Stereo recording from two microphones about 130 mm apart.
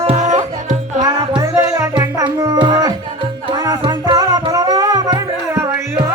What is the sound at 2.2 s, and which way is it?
Music, 35° right (ahead or behind).